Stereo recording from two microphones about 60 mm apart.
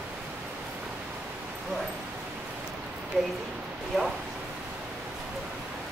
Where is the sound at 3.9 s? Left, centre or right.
Centre.